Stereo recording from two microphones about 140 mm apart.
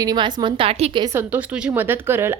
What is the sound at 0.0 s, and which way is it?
A woman's voice, 30° right (ahead or behind).